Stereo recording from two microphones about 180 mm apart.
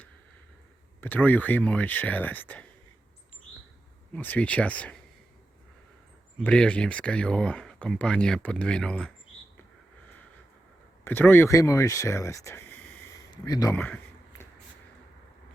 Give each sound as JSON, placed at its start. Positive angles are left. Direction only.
{"t": 1.0, "sound": "speech", "side_deg": 10}
{"t": 4.1, "sound": "speech", "side_deg": 10}
{"t": 6.4, "sound": "speech", "side_deg": 5}
{"t": 11.0, "sound": "speech", "side_deg": 10}
{"t": 13.1, "sound": "a sound", "side_deg": 20}